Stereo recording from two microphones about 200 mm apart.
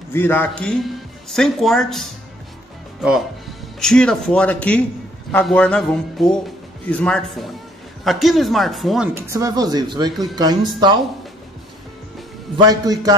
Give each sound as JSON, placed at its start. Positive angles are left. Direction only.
{"t": 0.1, "sound": "speech", "side_deg": 10}
{"t": 9.1, "sound": "speech", "side_deg": -15}
{"t": 12.5, "sound": "speech", "side_deg": -20}